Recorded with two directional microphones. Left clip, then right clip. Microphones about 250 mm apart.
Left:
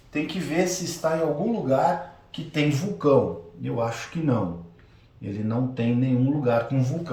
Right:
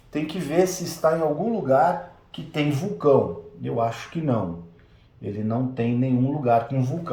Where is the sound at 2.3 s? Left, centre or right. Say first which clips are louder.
Left 1 dB; centre.